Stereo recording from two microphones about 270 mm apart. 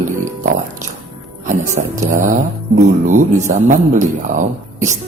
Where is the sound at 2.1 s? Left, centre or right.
Right.